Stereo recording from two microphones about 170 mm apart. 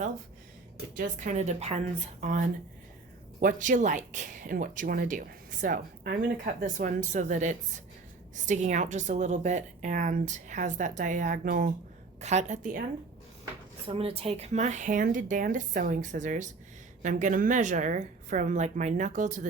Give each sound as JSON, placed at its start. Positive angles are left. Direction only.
{"t": 0.9, "sound": "speech", "side_deg": -50}
{"t": 12.2, "sound": "speech", "side_deg": -40}
{"t": 13.8, "sound": "speech", "side_deg": -35}